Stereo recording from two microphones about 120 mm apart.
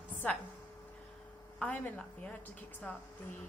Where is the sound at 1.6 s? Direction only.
10° left (ahead or behind).